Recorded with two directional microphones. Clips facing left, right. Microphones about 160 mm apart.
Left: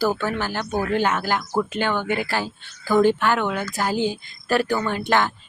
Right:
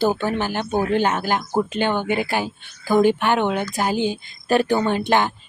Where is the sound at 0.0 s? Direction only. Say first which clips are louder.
Right 2 dB; 15° right (ahead or behind).